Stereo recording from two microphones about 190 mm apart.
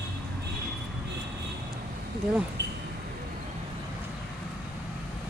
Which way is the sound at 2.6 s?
65° right (ahead or behind).